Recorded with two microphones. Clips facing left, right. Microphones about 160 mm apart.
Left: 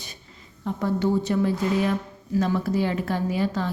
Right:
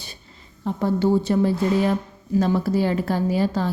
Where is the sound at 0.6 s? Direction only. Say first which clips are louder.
Right 3 dB; 30° right (ahead or behind).